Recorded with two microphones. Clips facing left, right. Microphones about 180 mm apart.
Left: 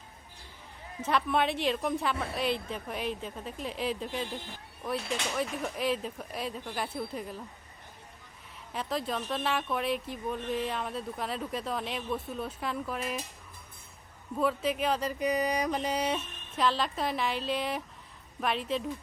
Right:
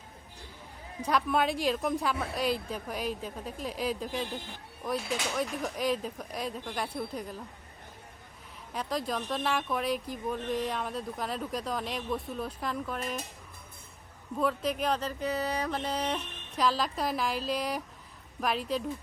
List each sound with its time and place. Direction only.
1.0 s speech: centre (ahead or behind)
8.7 s speech: centre (ahead or behind)
14.3 s speech: 5° left (ahead or behind)